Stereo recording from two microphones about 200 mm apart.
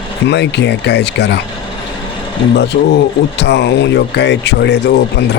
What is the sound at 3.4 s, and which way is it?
Speech, 60° left (ahead or behind).